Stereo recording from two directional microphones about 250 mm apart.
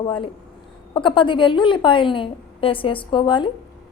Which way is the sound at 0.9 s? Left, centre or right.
Centre.